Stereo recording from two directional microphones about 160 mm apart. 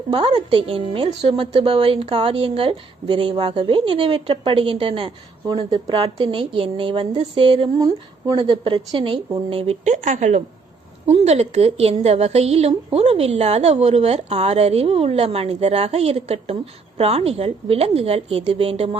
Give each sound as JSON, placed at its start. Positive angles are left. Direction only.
{"t": 0.1, "sound": "speech", "side_deg": -30}